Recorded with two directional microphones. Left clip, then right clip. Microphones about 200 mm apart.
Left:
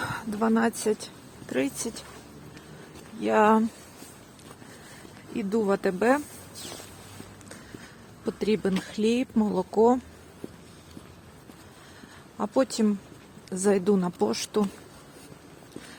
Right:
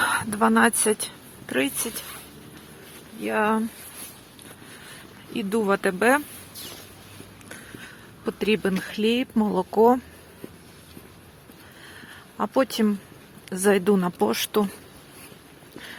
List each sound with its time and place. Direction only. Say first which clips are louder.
0.0 s speech: right 7 dB; 5° right (ahead or behind)
3.2 s speech: left 3 dB; 20° left (ahead or behind)
5.3 s speech: right 3 dB; centre (ahead or behind)
6.6 s a sound: even; 30° left (ahead or behind)
8.2 s speech: right 3 dB; centre (ahead or behind)
12.4 s speech: right 3 dB; centre (ahead or behind)